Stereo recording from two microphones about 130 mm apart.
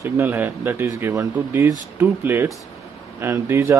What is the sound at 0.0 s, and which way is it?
Speech, 20° right (ahead or behind).